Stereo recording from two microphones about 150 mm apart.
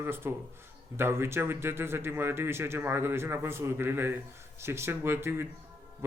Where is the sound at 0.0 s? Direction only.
15° right (ahead or behind).